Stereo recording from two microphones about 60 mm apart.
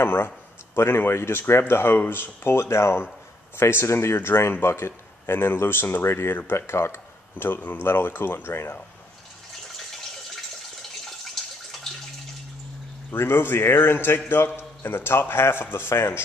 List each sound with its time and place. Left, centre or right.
0.0 s speech: left
9.8 s water: centre
13.1 s speech: left